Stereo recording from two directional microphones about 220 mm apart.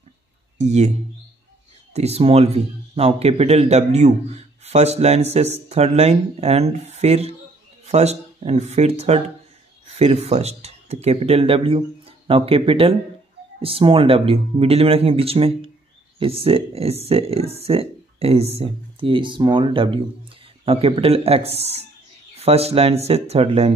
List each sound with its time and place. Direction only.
0.6 s speech: 30° right (ahead or behind)
2.0 s speech: 30° right (ahead or behind)